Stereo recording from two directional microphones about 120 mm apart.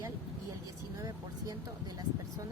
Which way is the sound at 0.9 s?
30° right (ahead or behind).